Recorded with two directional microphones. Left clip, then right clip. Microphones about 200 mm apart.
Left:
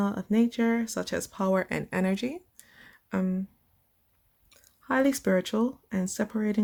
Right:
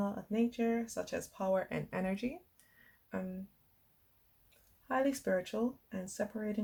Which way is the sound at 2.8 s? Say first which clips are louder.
Left 10 dB; 40° left (ahead or behind).